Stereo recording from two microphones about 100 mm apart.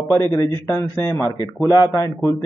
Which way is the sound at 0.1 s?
35° left (ahead or behind).